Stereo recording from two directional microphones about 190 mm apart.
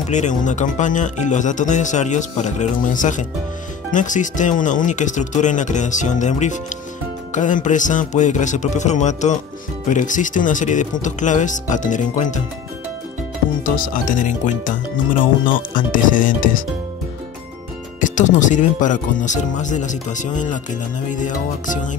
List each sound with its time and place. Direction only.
0.1 s speech: 40° left (ahead or behind)
13.7 s speech: 45° left (ahead or behind)
18.0 s speech: 40° left (ahead or behind)